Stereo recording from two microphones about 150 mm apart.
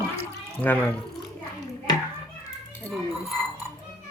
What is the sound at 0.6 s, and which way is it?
Speech, 10° left (ahead or behind).